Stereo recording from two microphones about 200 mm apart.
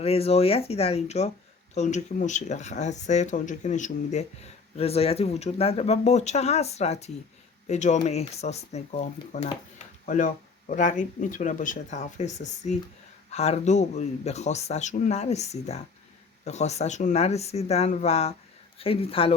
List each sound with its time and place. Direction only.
0.0 s speech: 30° left (ahead or behind)